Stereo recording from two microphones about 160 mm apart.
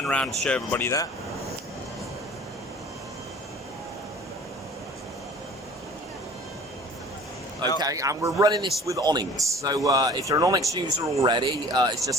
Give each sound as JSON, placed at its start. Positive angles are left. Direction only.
{"t": 0.0, "sound": "speech", "side_deg": 5}
{"t": 7.8, "sound": "a man's voice", "side_deg": -20}